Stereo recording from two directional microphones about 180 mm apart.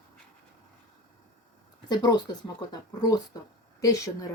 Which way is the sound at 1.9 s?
25° left (ahead or behind).